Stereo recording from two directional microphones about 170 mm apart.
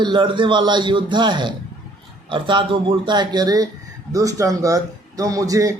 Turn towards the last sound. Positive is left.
turn(degrees=-20)  # may be behind; listen again after turning